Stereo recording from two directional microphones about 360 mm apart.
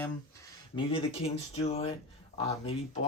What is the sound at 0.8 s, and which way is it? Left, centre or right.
Speech, centre.